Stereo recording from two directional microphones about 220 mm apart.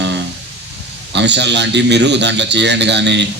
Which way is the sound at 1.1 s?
50° right (ahead or behind).